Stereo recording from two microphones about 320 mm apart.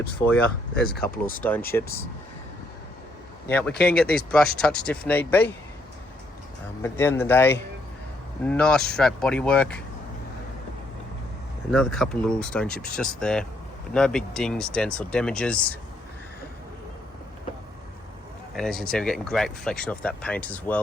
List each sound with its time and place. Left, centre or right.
0.2 s speech: centre
3.5 s speech: centre
6.8 s speech: centre
11.7 s speech: centre
18.5 s speech: centre